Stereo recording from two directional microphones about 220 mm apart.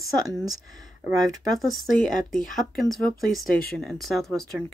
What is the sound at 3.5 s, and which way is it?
Speech, 40° left (ahead or behind).